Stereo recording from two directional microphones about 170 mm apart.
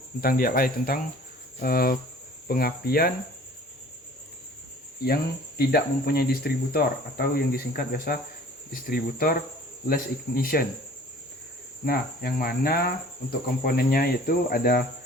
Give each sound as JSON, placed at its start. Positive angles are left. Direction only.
{"t": 0.2, "sound": "speech", "side_deg": 60}
{"t": 5.0, "sound": "speech", "side_deg": 65}
{"t": 11.9, "sound": "speech", "side_deg": 60}